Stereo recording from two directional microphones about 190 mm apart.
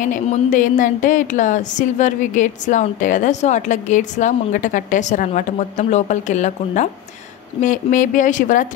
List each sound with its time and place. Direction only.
0.0 s a woman's voice: 40° left (ahead or behind)